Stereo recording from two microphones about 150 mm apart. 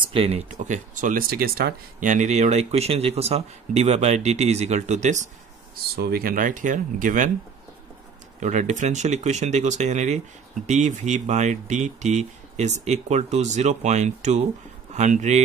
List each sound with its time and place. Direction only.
0.1 s speech: 40° right (ahead or behind)
5.9 s speech: 90° right; by 7.2 s 60° right (ahead or behind)
8.4 s speech: 55° right (ahead or behind)